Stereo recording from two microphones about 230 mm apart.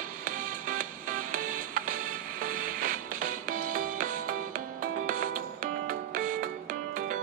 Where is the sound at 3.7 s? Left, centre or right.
Right.